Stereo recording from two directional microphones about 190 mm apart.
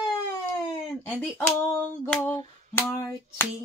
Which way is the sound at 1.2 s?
5° left (ahead or behind).